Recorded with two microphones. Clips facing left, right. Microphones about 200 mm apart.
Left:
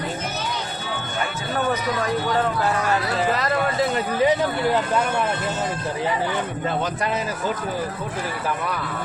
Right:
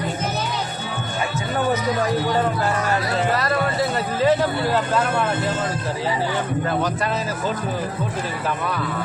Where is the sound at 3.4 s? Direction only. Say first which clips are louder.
Even; 20° left (ahead or behind).